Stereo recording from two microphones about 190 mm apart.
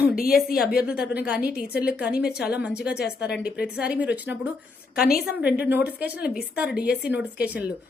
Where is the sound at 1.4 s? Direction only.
55° left (ahead or behind).